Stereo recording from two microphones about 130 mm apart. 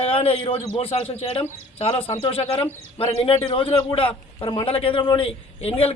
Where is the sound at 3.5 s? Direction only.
40° left (ahead or behind).